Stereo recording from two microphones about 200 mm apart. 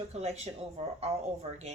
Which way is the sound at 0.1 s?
35° right (ahead or behind).